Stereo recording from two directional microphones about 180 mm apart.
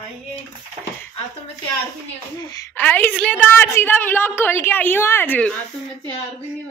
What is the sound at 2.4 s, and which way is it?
Speech, 20° left (ahead or behind).